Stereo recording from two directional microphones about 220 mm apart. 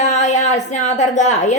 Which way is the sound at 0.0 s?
30° left (ahead or behind).